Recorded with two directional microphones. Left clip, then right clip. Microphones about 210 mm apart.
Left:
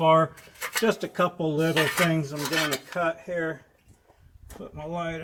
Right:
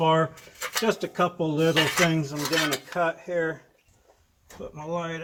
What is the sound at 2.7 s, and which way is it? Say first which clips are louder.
Cutlery: right 2 dB; 10° right (ahead or behind).